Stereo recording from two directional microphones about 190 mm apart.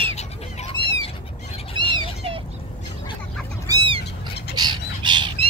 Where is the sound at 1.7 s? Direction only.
25° right (ahead or behind).